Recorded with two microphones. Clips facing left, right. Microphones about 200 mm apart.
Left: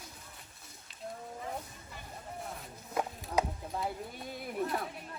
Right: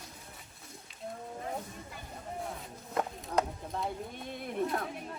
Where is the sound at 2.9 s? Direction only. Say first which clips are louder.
Right 1 dB; centre (ahead or behind).